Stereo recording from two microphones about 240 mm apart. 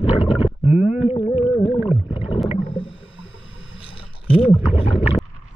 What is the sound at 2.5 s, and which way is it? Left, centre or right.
Whale vocalization, left.